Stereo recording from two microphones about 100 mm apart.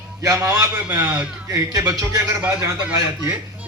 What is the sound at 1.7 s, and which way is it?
Speech, 35° right (ahead or behind).